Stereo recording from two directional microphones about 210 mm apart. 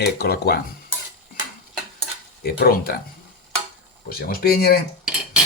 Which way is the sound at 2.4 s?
45° left (ahead or behind).